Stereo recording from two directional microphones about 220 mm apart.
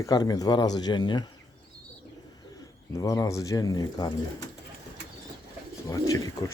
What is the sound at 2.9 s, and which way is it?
Speech, 15° left (ahead or behind).